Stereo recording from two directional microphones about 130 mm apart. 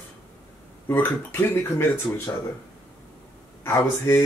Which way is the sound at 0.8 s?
15° left (ahead or behind).